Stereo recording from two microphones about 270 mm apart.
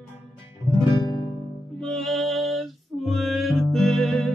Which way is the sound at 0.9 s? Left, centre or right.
Centre.